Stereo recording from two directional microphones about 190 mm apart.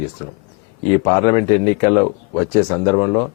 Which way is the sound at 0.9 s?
15° left (ahead or behind).